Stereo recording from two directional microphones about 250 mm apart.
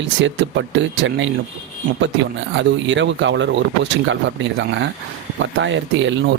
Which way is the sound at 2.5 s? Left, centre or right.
Right.